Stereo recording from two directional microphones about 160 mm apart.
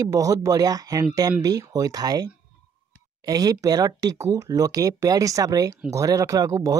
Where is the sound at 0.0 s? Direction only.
20° right (ahead or behind).